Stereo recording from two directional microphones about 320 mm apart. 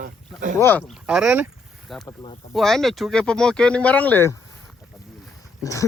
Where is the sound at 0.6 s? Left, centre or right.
Centre.